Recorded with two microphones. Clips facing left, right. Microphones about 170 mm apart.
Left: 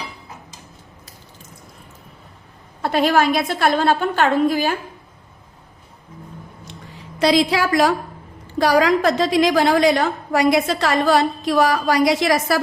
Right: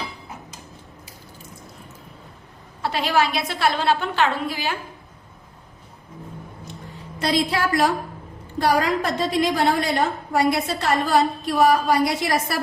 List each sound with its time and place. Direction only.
2.8 s a woman's voice: 50° left (ahead or behind)
7.2 s a woman's voice: 90° left